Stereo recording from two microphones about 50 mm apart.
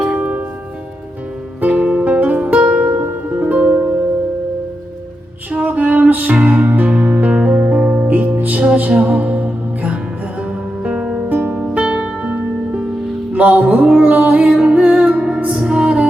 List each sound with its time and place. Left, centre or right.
0.1 s music: right
1.6 s music: right
5.5 s music: right
11.3 s music: right
11.7 s music: right